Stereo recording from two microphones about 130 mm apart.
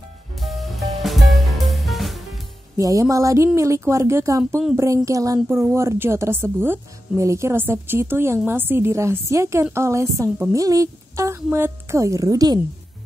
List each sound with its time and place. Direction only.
0.4 s music: centre (ahead or behind)
2.8 s a woman's voice: 25° right (ahead or behind)